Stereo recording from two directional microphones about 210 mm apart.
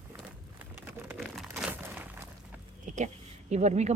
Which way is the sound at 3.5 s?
35° right (ahead or behind).